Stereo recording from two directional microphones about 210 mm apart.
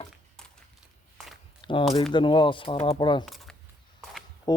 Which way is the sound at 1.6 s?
25° left (ahead or behind).